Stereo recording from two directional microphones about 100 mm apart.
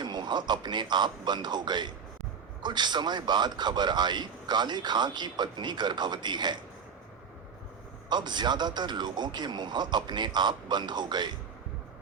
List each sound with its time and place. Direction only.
0.0 s a man's voice: 45° right (ahead or behind)
8.1 s a man's voice: 45° right (ahead or behind)